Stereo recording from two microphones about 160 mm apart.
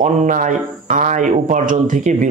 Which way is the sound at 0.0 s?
55° right (ahead or behind).